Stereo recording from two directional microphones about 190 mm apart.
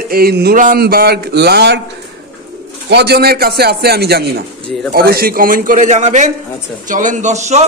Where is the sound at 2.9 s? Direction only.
60° right (ahead or behind); by 7.6 s 35° right (ahead or behind).